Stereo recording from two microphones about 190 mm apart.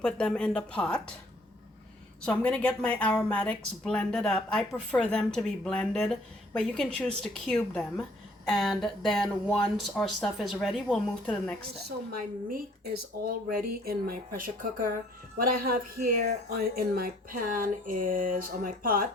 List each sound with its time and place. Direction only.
0.0 s speech: 5° left (ahead or behind)
2.2 s speech: 5° left (ahead or behind)
13.2 s speech: 50° right (ahead or behind)